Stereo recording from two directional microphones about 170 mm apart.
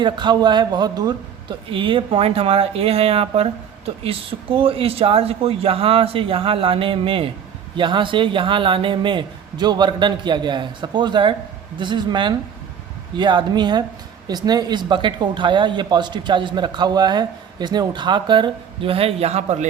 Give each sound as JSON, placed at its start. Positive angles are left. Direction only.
{"t": 0.0, "sound": "speech", "side_deg": -25}